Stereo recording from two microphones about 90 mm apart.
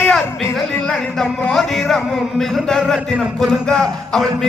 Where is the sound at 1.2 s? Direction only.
5° left (ahead or behind).